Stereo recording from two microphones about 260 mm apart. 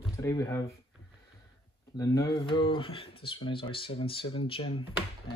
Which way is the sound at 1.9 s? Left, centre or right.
Centre.